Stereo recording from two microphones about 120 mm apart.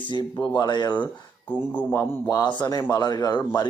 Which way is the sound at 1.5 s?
15° left (ahead or behind).